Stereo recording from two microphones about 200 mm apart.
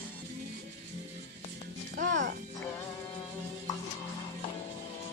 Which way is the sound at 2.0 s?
65° right (ahead or behind).